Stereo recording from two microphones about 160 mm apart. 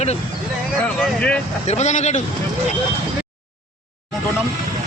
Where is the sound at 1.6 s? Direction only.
45° left (ahead or behind).